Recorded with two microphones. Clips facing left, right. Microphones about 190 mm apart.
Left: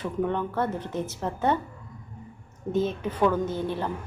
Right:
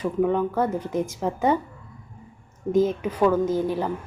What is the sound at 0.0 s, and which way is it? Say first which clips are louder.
A woman's voice: right 5 dB; 10° right (ahead or behind).